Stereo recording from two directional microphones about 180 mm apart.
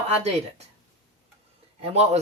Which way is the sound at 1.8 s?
35° right (ahead or behind).